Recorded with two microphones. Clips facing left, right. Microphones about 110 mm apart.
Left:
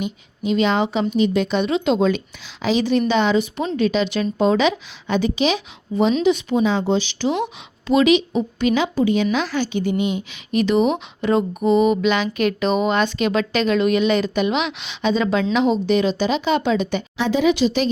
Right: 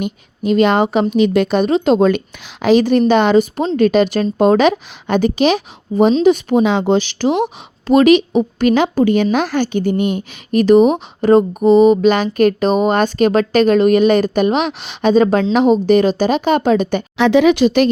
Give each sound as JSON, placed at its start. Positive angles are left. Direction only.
{"t": 0.0, "sound": "a woman's voice", "side_deg": -50}
{"t": 1.1, "sound": "a woman's voice", "side_deg": -65}
{"t": 6.7, "sound": "a woman's voice", "side_deg": -65}
{"t": 17.2, "sound": "speech", "side_deg": -70}